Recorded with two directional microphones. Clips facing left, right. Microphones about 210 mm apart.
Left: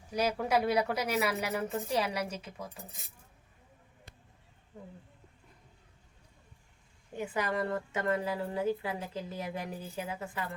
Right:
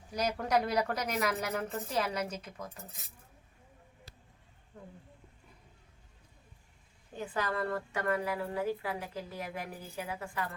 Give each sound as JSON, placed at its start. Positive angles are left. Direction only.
{"t": 0.2, "sound": "a woman's voice", "side_deg": 5}
{"t": 7.2, "sound": "a woman's voice", "side_deg": 15}